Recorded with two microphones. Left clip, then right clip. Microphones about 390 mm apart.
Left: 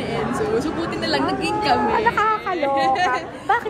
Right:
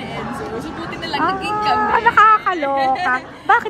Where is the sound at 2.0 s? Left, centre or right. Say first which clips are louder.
Right 7 dB; right.